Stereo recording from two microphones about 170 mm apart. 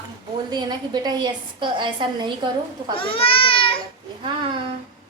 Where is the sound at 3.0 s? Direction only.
35° left (ahead or behind).